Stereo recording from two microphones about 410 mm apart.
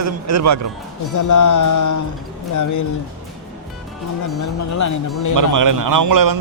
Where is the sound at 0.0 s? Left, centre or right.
Right.